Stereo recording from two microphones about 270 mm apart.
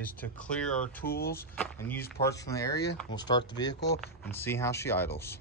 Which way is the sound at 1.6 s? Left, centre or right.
Centre.